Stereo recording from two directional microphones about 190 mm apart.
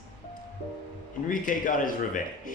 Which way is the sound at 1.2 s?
45° left (ahead or behind).